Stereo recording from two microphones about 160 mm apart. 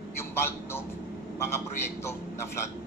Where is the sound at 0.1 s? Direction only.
15° left (ahead or behind).